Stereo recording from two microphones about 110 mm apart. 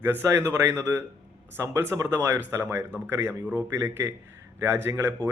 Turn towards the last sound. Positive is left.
turn(degrees=-25)  # may be behind; listen again after turning